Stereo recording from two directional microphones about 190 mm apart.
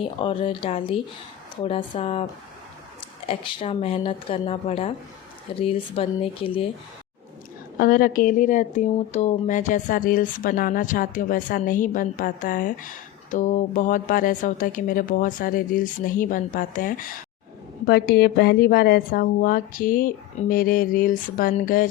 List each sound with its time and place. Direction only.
0.0 s speech: 25° left (ahead or behind)
3.2 s speech: 30° left (ahead or behind)
7.8 s speech: 50° left (ahead or behind)